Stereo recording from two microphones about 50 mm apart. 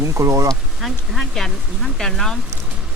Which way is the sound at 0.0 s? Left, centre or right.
Right.